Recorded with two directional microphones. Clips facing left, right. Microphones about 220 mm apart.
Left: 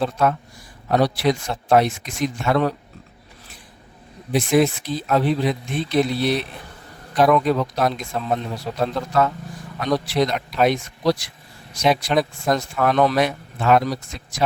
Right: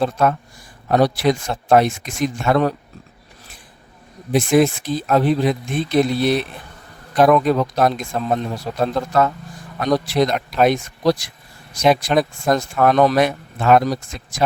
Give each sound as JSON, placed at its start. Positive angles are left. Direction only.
{"t": 0.0, "sound": "speech", "side_deg": -50}
{"t": 4.3, "sound": "speech", "side_deg": -50}